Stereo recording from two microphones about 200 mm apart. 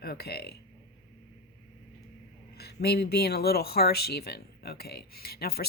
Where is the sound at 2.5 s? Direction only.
55° left (ahead or behind).